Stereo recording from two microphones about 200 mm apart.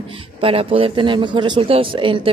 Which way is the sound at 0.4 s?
30° right (ahead or behind).